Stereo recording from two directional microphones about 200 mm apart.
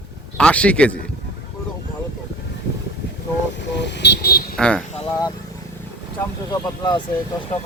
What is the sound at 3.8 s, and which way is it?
Vehicle, 60° left (ahead or behind).